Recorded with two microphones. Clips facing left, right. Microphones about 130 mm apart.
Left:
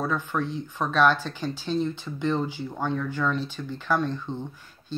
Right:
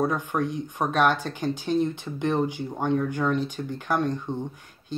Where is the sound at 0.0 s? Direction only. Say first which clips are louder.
Right 2 dB; 15° right (ahead or behind).